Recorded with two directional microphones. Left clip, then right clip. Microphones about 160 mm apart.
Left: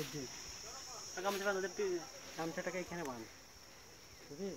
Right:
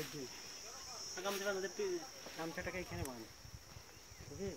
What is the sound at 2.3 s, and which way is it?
Speech, 40° left (ahead or behind).